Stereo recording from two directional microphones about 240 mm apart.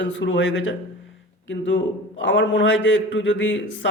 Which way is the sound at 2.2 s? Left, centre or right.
Left.